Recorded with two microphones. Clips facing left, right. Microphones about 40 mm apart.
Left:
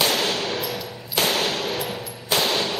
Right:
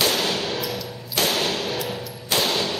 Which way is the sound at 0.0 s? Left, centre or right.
Centre.